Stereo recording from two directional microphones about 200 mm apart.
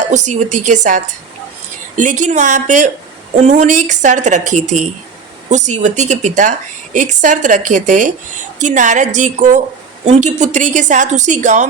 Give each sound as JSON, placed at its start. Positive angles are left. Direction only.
{"t": 0.0, "sound": "a woman's voice", "side_deg": -35}